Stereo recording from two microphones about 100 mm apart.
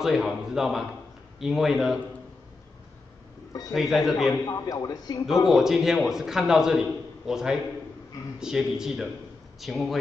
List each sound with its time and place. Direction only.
0.0 s a man's voice: 5° right (ahead or behind)
3.7 s a man's voice: centre (ahead or behind)
4.3 s a man's voice: 35° left (ahead or behind)
5.5 s a man's voice: 5° right (ahead or behind)